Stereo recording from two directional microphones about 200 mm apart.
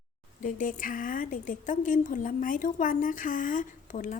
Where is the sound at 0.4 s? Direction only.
40° left (ahead or behind).